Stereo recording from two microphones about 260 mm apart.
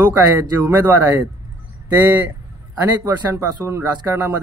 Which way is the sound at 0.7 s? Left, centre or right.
Centre.